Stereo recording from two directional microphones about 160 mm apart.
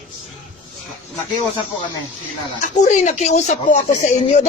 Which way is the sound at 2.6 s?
50° left (ahead or behind).